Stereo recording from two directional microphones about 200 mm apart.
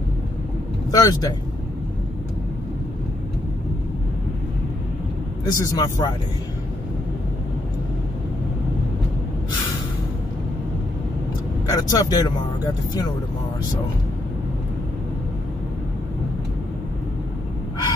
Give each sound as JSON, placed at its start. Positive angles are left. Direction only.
{"t": 0.9, "sound": "speech", "side_deg": 20}
{"t": 5.4, "sound": "speech", "side_deg": 20}
{"t": 11.7, "sound": "speech", "side_deg": 20}